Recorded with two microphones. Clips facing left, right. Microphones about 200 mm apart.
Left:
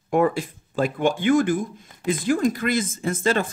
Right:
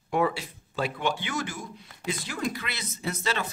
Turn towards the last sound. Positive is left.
turn(degrees=50)  # may be behind; listen again after turning